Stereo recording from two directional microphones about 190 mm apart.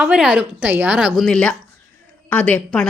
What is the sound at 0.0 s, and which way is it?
A woman's voice, 5° right (ahead or behind).